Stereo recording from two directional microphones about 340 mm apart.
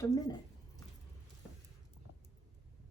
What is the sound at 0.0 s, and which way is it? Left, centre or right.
Speech, centre.